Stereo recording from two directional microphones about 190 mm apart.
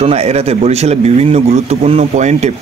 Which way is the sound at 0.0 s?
35° right (ahead or behind).